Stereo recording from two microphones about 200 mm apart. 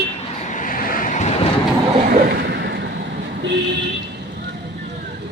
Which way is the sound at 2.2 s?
60° right (ahead or behind).